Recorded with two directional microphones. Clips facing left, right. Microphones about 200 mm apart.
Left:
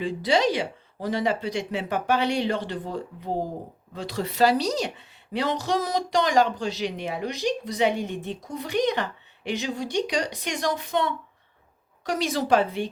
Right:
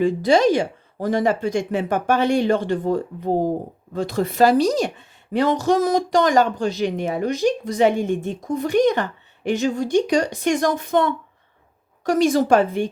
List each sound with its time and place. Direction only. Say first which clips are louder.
0.0 s a woman's voice: right 7 dB; 50° right (ahead or behind)